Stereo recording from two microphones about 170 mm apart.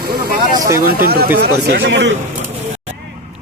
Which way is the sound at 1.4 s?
75° right (ahead or behind).